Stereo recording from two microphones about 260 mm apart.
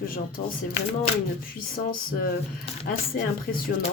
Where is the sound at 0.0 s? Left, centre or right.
Left.